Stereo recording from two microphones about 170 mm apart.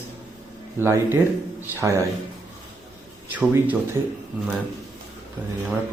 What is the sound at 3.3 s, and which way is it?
Speech, 10° right (ahead or behind).